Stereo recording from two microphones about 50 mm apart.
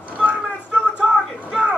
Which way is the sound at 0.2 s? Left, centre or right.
Right.